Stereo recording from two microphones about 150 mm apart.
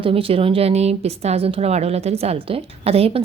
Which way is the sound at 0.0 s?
40° right (ahead or behind).